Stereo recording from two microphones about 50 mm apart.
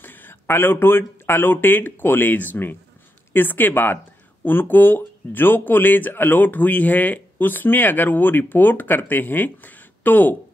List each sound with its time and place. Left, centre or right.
0.0 s speech: left